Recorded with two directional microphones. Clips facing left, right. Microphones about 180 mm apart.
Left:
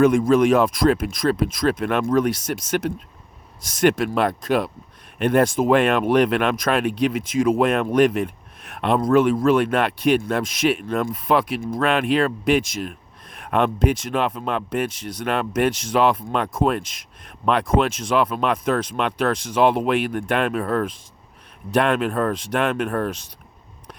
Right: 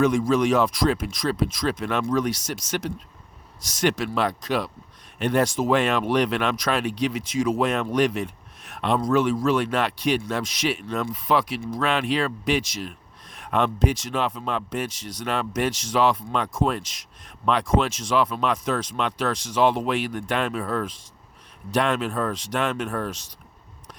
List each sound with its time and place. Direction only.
0.0 s speech: 55° left (ahead or behind)